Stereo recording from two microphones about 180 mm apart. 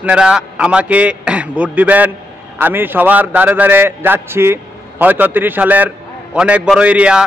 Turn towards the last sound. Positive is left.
turn(degrees=-5)  # may be behind; listen again after turning